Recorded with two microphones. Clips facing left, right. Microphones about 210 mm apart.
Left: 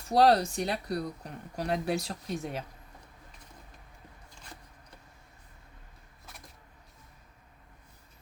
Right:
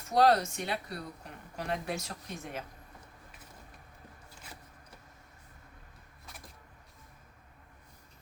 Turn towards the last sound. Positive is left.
turn(degrees=0)  # may be behind; listen again after turning